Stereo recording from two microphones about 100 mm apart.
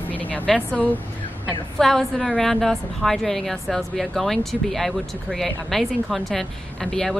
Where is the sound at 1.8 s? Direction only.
5° left (ahead or behind).